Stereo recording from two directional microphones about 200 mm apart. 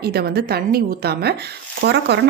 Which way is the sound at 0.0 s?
50° right (ahead or behind).